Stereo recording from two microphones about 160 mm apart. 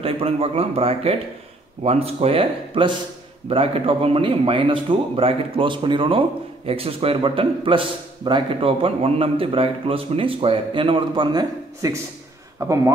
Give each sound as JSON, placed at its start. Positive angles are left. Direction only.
{"t": 0.0, "sound": "speech", "side_deg": -35}